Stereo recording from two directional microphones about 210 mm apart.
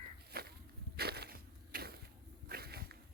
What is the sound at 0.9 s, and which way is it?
Crushing, 50° right (ahead or behind).